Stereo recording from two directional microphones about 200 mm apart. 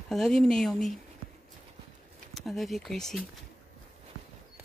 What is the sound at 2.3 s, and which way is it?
Speech, centre (ahead or behind).